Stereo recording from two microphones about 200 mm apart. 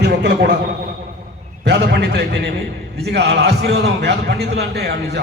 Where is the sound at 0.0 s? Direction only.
55° right (ahead or behind).